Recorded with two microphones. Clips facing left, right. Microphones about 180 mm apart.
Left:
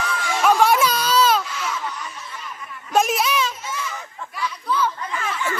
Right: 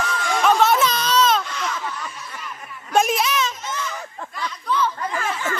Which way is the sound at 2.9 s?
5° left (ahead or behind).